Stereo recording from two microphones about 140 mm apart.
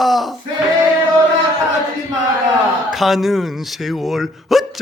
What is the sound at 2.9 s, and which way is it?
Speech, centre (ahead or behind).